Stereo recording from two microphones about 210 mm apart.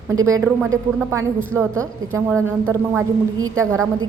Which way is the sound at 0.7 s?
10° right (ahead or behind).